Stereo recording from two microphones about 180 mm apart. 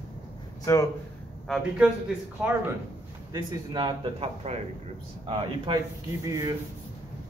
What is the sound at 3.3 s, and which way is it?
Speech, 25° right (ahead or behind).